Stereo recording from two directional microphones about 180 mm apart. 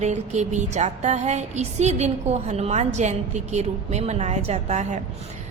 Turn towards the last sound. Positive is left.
turn(degrees=-40)  # may be behind; listen again after turning